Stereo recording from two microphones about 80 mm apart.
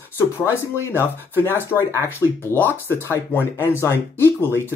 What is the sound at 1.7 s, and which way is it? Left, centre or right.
Speech, centre.